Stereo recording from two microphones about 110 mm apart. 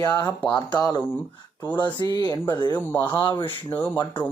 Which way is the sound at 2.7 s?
20° left (ahead or behind).